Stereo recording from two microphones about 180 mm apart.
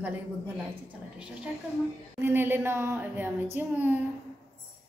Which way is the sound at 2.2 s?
10° right (ahead or behind).